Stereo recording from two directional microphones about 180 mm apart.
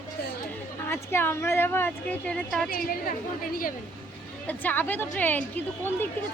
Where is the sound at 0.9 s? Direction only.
15° left (ahead or behind).